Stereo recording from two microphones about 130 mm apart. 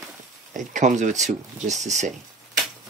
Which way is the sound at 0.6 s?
70° right (ahead or behind).